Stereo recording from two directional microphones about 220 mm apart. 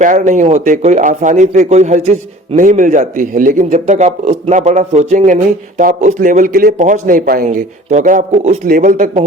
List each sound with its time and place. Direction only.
0.0 s speech: 35° right (ahead or behind)